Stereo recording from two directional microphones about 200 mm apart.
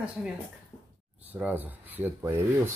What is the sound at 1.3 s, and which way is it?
Speech, 10° right (ahead or behind).